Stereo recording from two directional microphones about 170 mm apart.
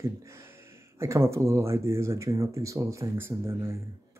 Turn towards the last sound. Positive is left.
turn(degrees=-15)  # may be behind; listen again after turning